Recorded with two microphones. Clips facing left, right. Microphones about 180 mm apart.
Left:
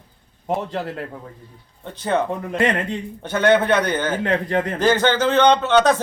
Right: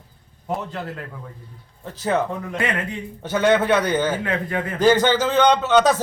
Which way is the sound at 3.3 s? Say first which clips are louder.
Left 1 dB; 5° right (ahead or behind).